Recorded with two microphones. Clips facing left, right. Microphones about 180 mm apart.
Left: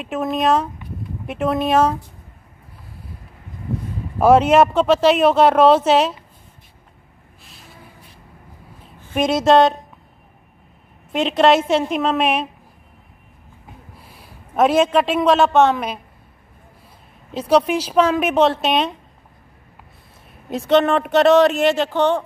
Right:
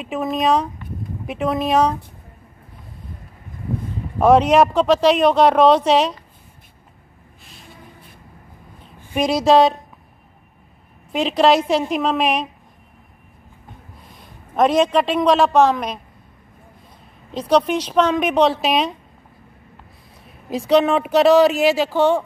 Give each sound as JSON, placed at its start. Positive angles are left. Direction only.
{"t": 0.0, "sound": "speech", "side_deg": 0}
{"t": 4.2, "sound": "speech", "side_deg": 5}
{"t": 7.4, "sound": "a sound", "side_deg": 0}
{"t": 8.8, "sound": "a woman's voice", "side_deg": 0}
{"t": 11.1, "sound": "speech", "side_deg": 0}
{"t": 13.7, "sound": "a man's voice", "side_deg": 10}
{"t": 17.3, "sound": "speech", "side_deg": 5}
{"t": 20.4, "sound": "speech", "side_deg": 0}